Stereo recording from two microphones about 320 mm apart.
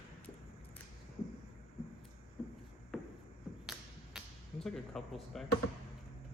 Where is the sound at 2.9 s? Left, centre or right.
Centre.